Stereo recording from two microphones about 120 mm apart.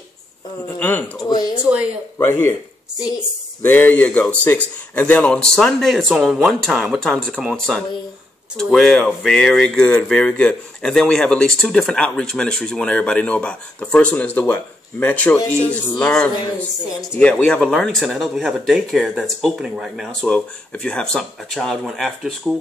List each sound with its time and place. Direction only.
0.7 s speech: 15° left (ahead or behind)
1.1 s speech: 30° left (ahead or behind)
1.6 s speech: 10° right (ahead or behind)
2.1 s speech: 20° left (ahead or behind)
3.6 s speech: 15° left (ahead or behind)